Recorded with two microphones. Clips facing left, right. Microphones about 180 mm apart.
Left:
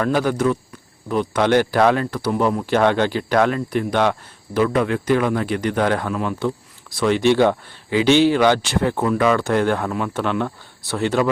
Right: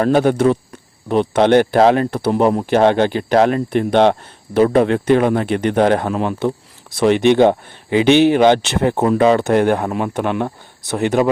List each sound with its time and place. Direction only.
0.0 s speech: 25° right (ahead or behind)